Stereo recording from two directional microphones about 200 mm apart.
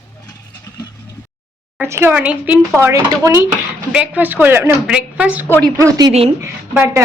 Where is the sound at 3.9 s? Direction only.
5° right (ahead or behind).